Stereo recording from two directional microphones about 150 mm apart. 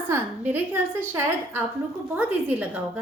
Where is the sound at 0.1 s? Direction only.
10° right (ahead or behind).